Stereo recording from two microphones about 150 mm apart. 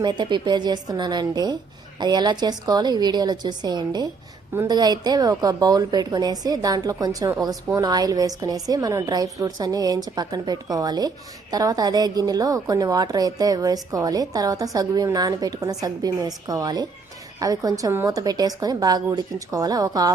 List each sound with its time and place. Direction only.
0.0 s a woman's voice: 30° right (ahead or behind)